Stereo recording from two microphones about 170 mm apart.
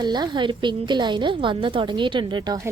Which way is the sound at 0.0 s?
25° right (ahead or behind).